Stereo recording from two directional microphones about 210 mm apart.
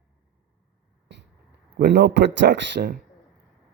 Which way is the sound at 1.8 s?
55° right (ahead or behind).